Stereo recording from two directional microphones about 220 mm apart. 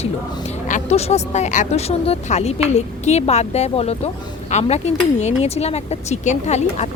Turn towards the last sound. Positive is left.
turn(degrees=30)  # may be behind; listen again after turning